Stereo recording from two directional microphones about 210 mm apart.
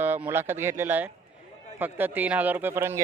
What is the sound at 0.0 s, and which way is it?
A man's voice, 10° right (ahead or behind).